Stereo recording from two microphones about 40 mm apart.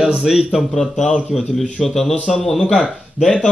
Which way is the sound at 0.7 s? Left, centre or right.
Centre.